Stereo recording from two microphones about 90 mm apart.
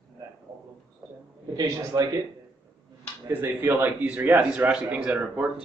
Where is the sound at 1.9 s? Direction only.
50° right (ahead or behind).